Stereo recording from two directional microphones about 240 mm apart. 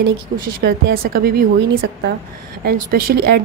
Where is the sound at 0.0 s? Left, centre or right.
Right.